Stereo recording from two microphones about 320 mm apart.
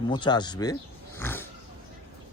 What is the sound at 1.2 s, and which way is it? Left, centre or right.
Roaring cats, centre.